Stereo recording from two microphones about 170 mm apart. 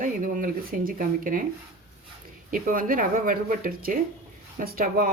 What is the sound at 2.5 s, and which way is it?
A woman's voice, 55° right (ahead or behind).